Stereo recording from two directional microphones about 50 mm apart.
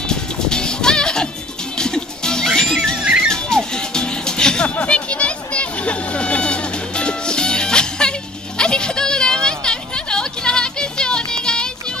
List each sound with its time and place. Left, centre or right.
0.1 s music: centre
3.0 s music: centre
3.3 s music: centre